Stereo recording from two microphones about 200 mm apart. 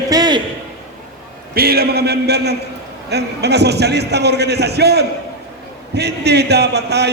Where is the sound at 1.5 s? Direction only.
50° right (ahead or behind).